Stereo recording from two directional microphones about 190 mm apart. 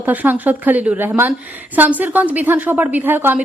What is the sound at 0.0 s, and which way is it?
A woman's voice, 10° right (ahead or behind).